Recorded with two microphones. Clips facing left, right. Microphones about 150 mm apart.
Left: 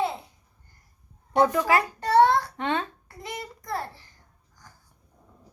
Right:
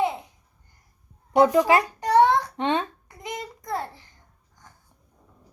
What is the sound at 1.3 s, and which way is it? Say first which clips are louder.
Babbling: right 4 dB; 15° right (ahead or behind).